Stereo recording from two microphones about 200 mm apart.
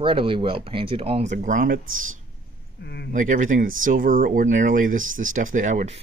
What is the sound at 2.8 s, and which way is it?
Speech, 55° left (ahead or behind).